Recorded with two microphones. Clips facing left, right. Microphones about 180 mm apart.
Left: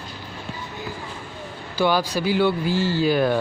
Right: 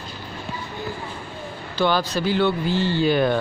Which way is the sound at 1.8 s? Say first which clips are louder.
Even; 10° left (ahead or behind).